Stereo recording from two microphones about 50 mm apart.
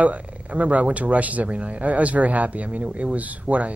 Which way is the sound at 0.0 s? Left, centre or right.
Right.